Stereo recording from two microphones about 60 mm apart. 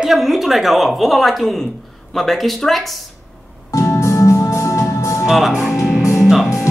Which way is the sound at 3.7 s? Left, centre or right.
Left.